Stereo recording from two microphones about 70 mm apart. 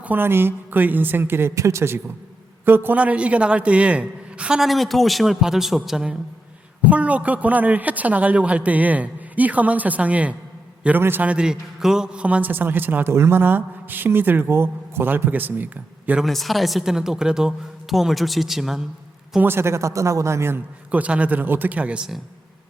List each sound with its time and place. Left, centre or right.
0.0 s speech: right
2.6 s speech: right
3.0 s a woman's voice: centre
4.6 s speech: centre
6.8 s a man's voice: right
11.3 s a man's voice: centre
16.2 s speech: centre
19.4 s speech: right
20.9 s a man's voice: right